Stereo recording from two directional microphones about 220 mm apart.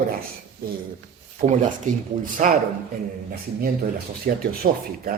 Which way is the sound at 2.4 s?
35° right (ahead or behind).